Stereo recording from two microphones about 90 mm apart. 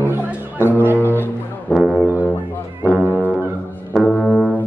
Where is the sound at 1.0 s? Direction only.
20° left (ahead or behind).